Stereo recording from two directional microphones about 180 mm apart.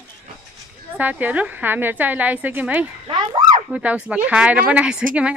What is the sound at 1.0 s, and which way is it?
A woman's voice, 10° right (ahead or behind).